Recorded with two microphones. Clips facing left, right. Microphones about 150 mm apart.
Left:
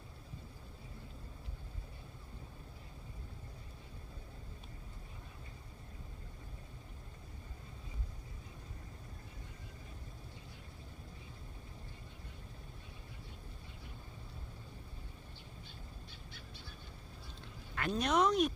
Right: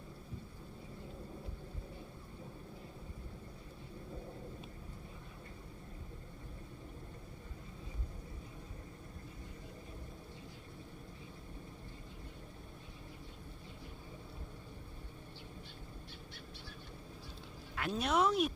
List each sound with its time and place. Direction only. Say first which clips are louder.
17.7 s speech: left 1 dB; 5° right (ahead or behind)